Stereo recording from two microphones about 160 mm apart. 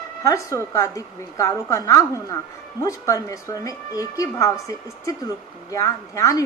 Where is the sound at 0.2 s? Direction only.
20° left (ahead or behind).